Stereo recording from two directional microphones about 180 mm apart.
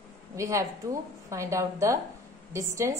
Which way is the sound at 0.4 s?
15° right (ahead or behind).